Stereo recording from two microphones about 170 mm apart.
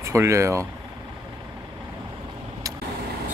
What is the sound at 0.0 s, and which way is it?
Speech, 15° right (ahead or behind).